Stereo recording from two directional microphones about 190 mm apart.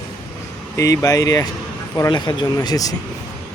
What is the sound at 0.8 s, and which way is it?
Speech, 20° left (ahead or behind).